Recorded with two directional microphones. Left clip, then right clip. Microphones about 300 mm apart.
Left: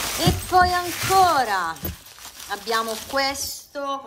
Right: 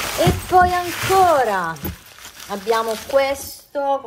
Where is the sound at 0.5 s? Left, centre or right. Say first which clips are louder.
Right 3 dB; centre.